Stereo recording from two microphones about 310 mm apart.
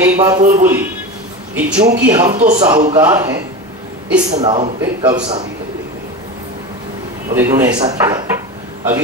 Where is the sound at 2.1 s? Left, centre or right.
Centre.